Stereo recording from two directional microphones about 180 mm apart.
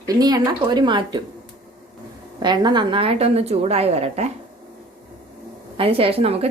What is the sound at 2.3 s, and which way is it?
A woman's voice, 25° right (ahead or behind).